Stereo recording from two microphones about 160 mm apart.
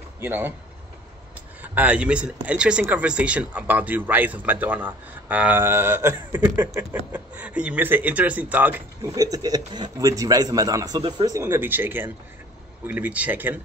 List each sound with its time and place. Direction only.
0.2 s speech: 15° right (ahead or behind)
1.6 s speech: 10° right (ahead or behind)
9.1 s a man's voice: 25° right (ahead or behind)
11.3 s speech: 15° right (ahead or behind)